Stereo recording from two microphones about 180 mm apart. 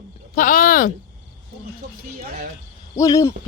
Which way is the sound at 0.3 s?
45° left (ahead or behind).